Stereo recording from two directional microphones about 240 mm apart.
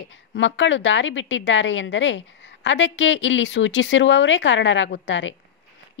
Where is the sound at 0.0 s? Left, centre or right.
Left.